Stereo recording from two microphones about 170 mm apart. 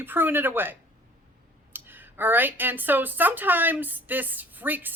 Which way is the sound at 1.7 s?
10° right (ahead or behind).